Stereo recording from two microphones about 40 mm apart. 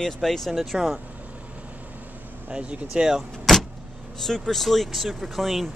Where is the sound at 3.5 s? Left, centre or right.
Centre.